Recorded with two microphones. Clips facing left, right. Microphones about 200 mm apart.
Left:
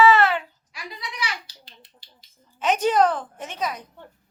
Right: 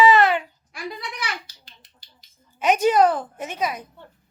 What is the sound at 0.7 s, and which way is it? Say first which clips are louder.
A child's voice: right 5 dB; 50° right (ahead or behind).